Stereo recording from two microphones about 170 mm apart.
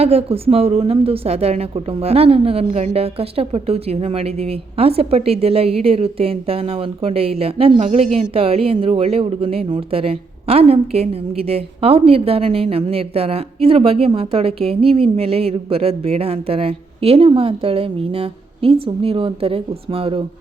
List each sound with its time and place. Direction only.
0.0 s a woman's voice: 35° right (ahead or behind)